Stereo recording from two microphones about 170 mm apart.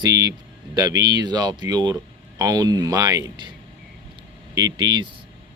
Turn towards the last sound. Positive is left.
turn(degrees=-25)  # may be behind; listen again after turning